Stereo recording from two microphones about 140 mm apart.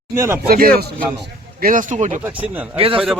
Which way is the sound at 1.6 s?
70° right (ahead or behind).